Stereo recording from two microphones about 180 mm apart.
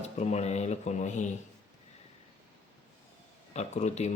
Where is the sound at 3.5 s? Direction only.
40° left (ahead or behind).